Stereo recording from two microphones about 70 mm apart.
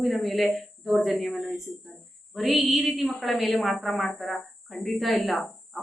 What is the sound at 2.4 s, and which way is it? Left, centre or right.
Speech, centre.